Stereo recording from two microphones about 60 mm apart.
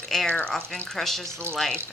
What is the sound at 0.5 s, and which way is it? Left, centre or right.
Speech, centre.